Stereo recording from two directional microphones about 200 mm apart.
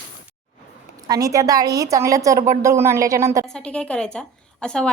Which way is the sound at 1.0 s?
20° right (ahead or behind).